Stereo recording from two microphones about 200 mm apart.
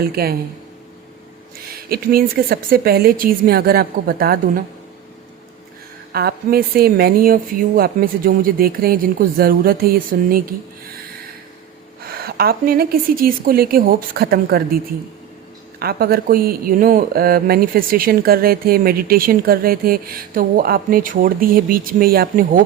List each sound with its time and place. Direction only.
0.0 s speech: 50° right (ahead or behind)
1.6 s speech: 50° right (ahead or behind)
6.1 s speech: 50° right (ahead or behind)
12.0 s speech: 50° right (ahead or behind)
15.8 s speech: 50° right (ahead or behind)